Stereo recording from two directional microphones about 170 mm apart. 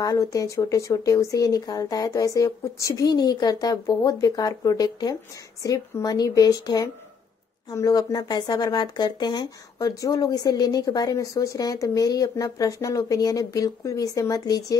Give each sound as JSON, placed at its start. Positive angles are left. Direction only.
{"t": 0.0, "sound": "speech", "side_deg": 20}